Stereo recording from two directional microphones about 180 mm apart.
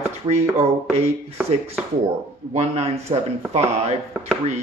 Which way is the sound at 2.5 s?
35° right (ahead or behind).